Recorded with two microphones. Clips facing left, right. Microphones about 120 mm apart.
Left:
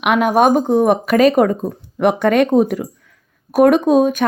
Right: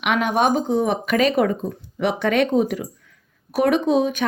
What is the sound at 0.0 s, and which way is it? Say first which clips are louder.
Speech: left 6 dB; 45° left (ahead or behind).